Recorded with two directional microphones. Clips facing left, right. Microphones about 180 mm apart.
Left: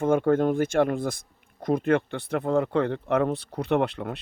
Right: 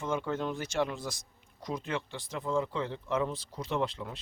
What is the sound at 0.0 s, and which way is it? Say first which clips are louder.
Speech: left 11 dB; 55° left (ahead or behind).